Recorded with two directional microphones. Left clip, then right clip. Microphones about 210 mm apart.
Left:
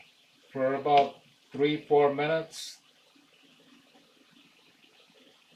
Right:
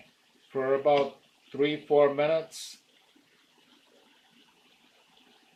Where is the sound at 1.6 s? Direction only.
45° right (ahead or behind).